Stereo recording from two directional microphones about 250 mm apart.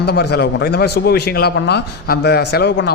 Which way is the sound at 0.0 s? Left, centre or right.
Left.